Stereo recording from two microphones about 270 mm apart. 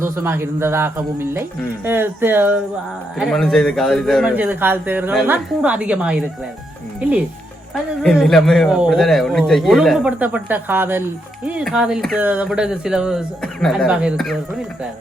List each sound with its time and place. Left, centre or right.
0.0 s a man's voice: centre